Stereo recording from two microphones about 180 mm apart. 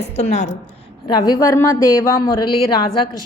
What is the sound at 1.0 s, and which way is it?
A woman's voice, 25° left (ahead or behind).